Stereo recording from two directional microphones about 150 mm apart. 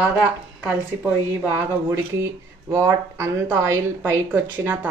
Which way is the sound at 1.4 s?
15° right (ahead or behind).